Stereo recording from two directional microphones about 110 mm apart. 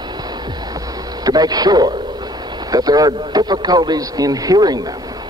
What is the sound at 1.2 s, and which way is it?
A man's voice, 35° right (ahead or behind).